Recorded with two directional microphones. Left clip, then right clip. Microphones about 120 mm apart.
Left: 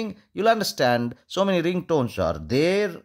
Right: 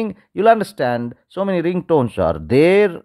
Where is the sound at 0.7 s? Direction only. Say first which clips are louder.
Right 1 dB; 5° right (ahead or behind).